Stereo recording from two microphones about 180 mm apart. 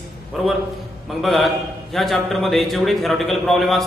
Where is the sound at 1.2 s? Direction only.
Centre (ahead or behind).